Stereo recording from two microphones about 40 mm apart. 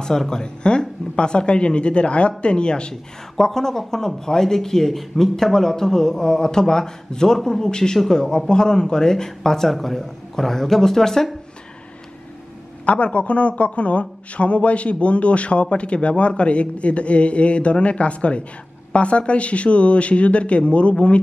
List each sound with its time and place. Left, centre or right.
0.0 s a woman's voice: centre
2.9 s a man's voice: centre
12.8 s a man's voice: left